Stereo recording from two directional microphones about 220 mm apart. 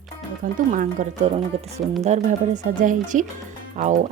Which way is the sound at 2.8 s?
35° right (ahead or behind).